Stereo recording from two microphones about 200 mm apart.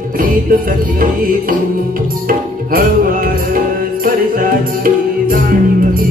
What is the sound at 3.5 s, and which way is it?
Music, 45° right (ahead or behind).